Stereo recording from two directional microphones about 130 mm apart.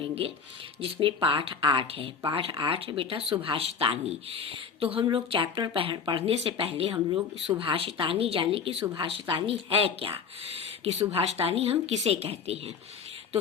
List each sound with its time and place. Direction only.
0.8 s speech: 45° right (ahead or behind)